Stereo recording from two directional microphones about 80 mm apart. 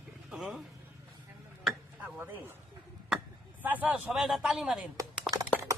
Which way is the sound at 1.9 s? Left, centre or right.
Centre.